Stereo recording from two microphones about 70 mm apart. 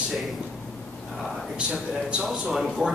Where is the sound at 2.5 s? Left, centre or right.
Centre.